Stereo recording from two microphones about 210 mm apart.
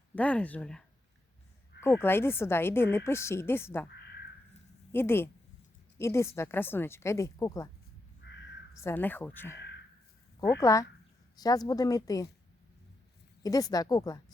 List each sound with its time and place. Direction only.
0.2 s a woman's voice: 5° left (ahead or behind)
4.9 s a woman's voice: 10° left (ahead or behind)
8.2 s crow: 55° left (ahead or behind)
8.8 s a woman's voice: 10° left (ahead or behind)
10.6 s a woman's voice: 15° left (ahead or behind)
13.4 s a woman's voice: 15° left (ahead or behind)